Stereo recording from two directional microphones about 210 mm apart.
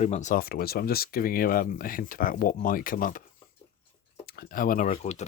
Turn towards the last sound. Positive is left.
turn(degrees=35)  # may be behind; listen again after turning